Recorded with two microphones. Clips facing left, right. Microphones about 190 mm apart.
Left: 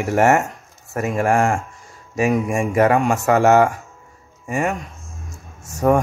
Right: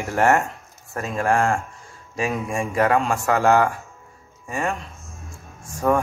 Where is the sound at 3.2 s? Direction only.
20° left (ahead or behind).